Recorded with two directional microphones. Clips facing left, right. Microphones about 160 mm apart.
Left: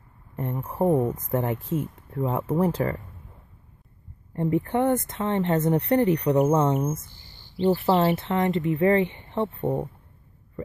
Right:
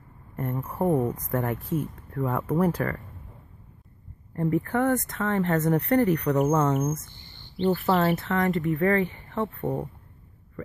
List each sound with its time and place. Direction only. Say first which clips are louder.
0.8 s speech: left 2 dB; 10° left (ahead or behind)
1.1 s speech: left 2 dB; 20° left (ahead or behind)
4.4 s speech: left 1 dB; 25° left (ahead or behind)
9.6 s speech: left 3 dB; 15° left (ahead or behind)